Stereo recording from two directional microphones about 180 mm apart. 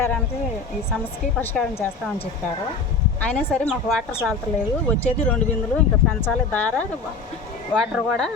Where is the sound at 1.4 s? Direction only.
10° left (ahead or behind).